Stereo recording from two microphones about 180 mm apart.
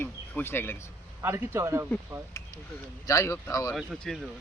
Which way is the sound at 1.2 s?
15° right (ahead or behind).